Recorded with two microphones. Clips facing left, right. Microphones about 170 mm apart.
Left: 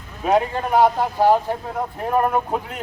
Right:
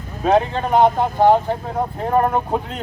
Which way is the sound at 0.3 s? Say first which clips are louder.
Right 2 dB; 25° right (ahead or behind).